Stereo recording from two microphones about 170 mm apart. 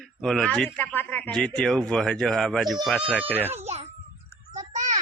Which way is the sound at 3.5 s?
40° right (ahead or behind).